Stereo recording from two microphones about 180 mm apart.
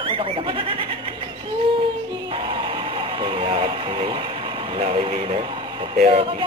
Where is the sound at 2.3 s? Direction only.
30° right (ahead or behind).